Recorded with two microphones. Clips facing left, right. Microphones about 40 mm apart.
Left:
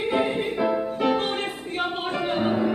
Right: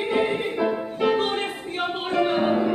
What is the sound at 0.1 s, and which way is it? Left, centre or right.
Music, centre.